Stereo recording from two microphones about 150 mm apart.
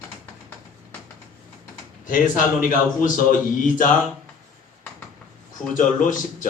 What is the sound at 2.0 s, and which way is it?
Speech, 60° left (ahead or behind).